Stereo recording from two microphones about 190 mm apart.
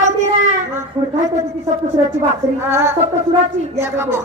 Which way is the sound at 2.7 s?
15° right (ahead or behind).